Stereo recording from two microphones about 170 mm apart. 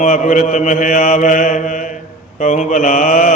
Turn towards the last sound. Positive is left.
turn(degrees=50)  # may be behind; listen again after turning